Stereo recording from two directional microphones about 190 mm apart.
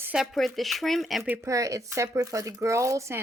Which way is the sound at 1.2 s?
15° right (ahead or behind).